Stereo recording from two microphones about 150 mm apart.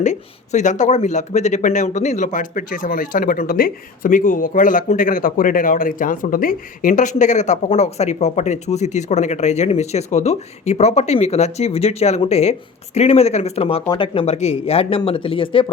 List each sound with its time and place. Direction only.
0.0 s speech: 55° left (ahead or behind); by 15.6 s 35° left (ahead or behind)